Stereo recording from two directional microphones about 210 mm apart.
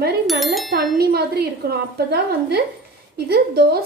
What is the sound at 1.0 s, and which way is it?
A woman's voice, 50° right (ahead or behind).